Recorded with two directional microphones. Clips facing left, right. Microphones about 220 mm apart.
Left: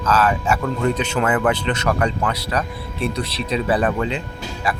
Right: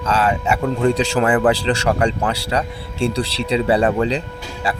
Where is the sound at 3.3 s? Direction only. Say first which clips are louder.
Right 3 dB; 75° right (ahead or behind).